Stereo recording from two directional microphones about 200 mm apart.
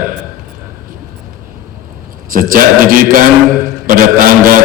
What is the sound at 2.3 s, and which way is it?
A man's voice, 45° right (ahead or behind).